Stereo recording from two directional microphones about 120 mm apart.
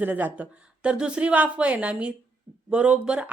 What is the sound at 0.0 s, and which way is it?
Speech, 15° right (ahead or behind).